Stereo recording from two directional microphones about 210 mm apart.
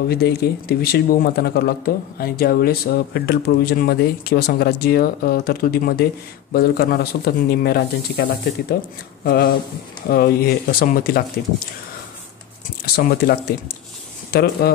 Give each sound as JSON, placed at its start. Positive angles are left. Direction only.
{"t": 0.1, "sound": "speech", "side_deg": 50}
{"t": 12.8, "sound": "speech", "side_deg": 45}